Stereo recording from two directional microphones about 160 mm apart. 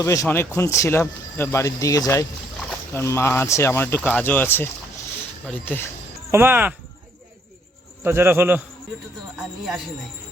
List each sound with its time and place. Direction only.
0.0 s speech: 20° left (ahead or behind)
6.3 s a man's voice: 15° right (ahead or behind)
8.0 s a man's voice: 15° right (ahead or behind)